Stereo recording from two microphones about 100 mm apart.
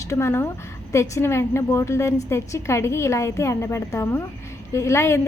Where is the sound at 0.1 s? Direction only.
25° left (ahead or behind).